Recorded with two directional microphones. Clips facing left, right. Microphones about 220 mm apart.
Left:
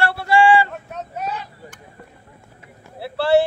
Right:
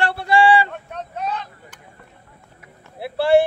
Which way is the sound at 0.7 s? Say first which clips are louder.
Even; 5° left (ahead or behind).